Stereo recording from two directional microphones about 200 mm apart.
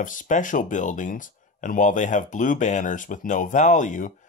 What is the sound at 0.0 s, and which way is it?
Speech, 40° left (ahead or behind).